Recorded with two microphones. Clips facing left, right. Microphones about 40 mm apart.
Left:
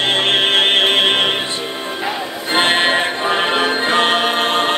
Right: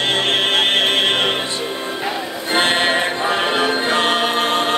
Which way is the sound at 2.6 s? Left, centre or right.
Left.